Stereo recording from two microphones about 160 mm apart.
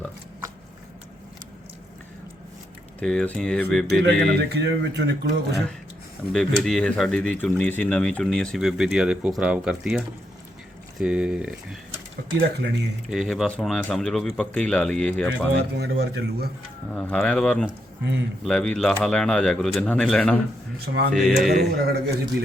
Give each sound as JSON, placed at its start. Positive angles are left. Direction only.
{"t": 3.0, "sound": "speech", "side_deg": 5}
{"t": 3.8, "sound": "speech", "side_deg": -90}
{"t": 6.3, "sound": "speech", "side_deg": 5}
{"t": 11.0, "sound": "speech", "side_deg": -5}
{"t": 12.4, "sound": "speech", "side_deg": -90}
{"t": 13.1, "sound": "speech", "side_deg": 0}
{"t": 15.8, "sound": "speech", "side_deg": -90}
{"t": 16.9, "sound": "speech", "side_deg": 5}
{"t": 20.8, "sound": "speech", "side_deg": -90}
{"t": 21.1, "sound": "speech", "side_deg": 0}
{"t": 21.7, "sound": "a man's voice", "side_deg": -80}